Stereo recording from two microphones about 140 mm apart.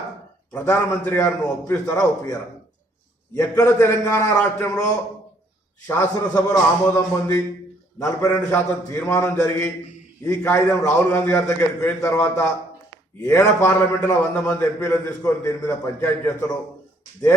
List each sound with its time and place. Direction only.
0.5 s a man's voice: 20° left (ahead or behind)
3.3 s a man's voice: 20° left (ahead or behind)
5.9 s a man's voice: 20° left (ahead or behind)